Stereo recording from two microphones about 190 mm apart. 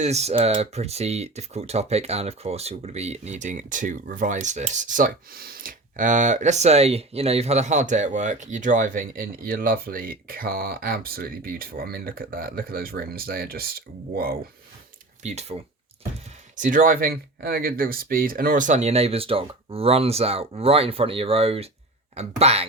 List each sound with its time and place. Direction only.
0.0 s speech: 35° right (ahead or behind); by 14.3 s 50° right (ahead or behind)
15.2 s speech: 35° right (ahead or behind)
16.6 s speech: 45° right (ahead or behind)